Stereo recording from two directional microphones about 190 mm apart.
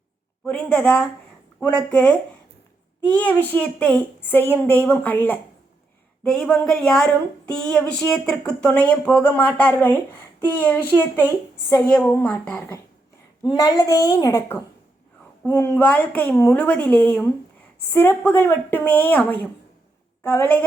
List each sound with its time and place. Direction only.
0.4 s a woman's voice: 5° left (ahead or behind)
3.2 s a woman's voice: 10° left (ahead or behind)